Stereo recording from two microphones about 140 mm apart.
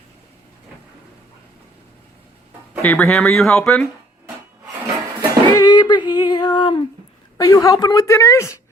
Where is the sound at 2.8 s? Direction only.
10° left (ahead or behind).